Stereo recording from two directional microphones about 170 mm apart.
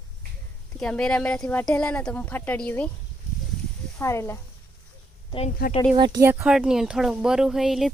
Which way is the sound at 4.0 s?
15° left (ahead or behind).